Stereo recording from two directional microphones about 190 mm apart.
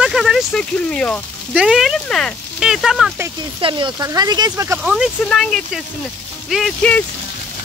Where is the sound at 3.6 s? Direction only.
25° right (ahead or behind).